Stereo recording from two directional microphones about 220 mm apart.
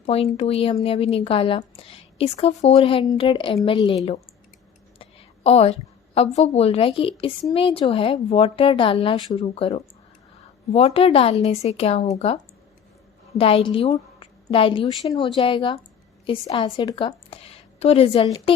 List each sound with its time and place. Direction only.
0.0 s a woman's voice: 30° left (ahead or behind)
13.4 s a woman's voice: 25° left (ahead or behind)